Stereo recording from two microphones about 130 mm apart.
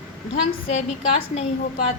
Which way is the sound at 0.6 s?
55° left (ahead or behind).